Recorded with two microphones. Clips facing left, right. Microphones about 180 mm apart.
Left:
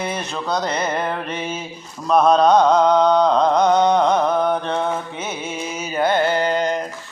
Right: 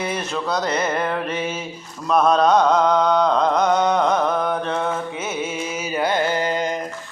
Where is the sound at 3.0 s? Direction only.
30° left (ahead or behind).